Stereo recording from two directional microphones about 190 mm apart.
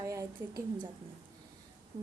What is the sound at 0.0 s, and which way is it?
Speech, 15° right (ahead or behind).